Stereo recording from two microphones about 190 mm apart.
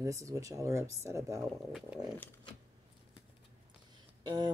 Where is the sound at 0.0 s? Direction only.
15° right (ahead or behind).